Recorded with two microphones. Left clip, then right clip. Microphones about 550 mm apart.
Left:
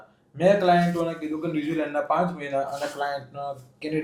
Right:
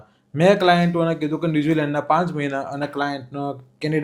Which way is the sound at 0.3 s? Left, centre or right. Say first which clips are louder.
Right 3 dB; right.